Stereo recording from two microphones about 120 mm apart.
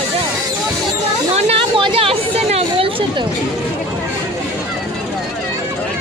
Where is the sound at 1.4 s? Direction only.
55° right (ahead or behind).